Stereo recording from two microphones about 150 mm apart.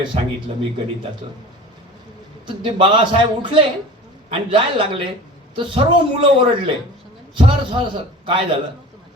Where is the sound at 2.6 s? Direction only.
30° right (ahead or behind).